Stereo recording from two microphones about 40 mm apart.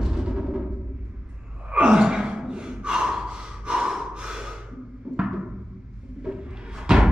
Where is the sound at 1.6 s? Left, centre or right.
Right.